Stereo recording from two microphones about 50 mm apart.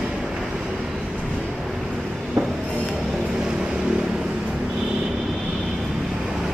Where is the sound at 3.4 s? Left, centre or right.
Centre.